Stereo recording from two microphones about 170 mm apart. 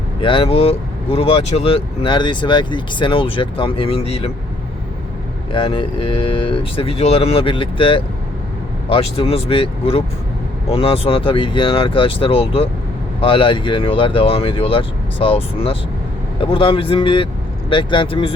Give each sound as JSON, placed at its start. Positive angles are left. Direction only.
{"t": 0.2, "sound": "speech", "side_deg": 30}
{"t": 5.5, "sound": "speech", "side_deg": 30}